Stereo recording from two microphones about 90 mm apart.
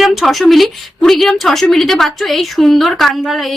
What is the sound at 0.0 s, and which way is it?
Speech, centre (ahead or behind).